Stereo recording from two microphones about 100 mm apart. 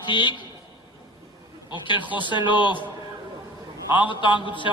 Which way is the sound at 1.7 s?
55° left (ahead or behind).